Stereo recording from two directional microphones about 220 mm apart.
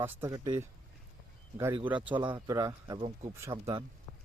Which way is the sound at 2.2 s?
20° right (ahead or behind).